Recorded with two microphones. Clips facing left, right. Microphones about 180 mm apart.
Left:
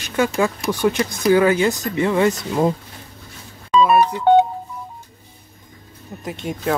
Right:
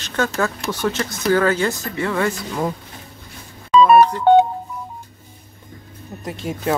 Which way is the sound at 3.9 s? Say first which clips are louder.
Right 4 dB; 5° left (ahead or behind).